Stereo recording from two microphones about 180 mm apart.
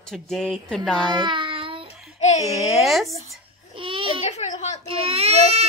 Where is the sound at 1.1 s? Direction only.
25° right (ahead or behind).